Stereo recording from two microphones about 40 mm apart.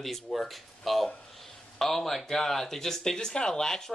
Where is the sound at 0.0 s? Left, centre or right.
Centre.